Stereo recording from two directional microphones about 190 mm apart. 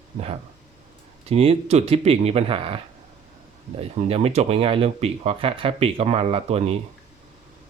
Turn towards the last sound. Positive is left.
turn(degrees=-30)  # may be behind; listen again after turning